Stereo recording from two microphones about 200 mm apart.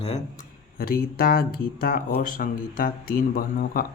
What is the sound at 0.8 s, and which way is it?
Speech, 45° left (ahead or behind).